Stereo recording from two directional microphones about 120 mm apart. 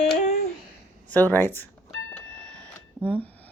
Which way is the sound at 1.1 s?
15° left (ahead or behind).